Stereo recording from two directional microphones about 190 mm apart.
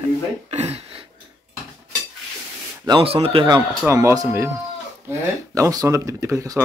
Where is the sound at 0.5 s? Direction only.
35° right (ahead or behind).